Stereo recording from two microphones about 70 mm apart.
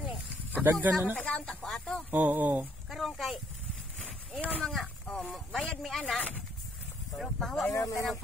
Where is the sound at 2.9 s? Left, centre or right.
Centre.